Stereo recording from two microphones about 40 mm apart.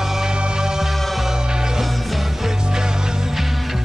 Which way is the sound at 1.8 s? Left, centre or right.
Centre.